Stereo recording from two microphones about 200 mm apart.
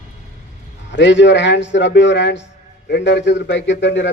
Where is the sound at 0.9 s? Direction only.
60° left (ahead or behind).